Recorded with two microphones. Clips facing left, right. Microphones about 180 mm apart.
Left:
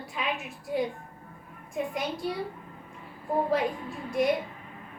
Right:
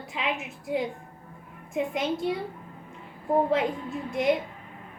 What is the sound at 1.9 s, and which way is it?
Speech, 20° right (ahead or behind).